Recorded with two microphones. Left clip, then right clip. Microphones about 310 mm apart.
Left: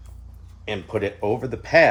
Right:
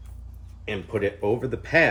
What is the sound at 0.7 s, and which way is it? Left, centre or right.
Speech, left.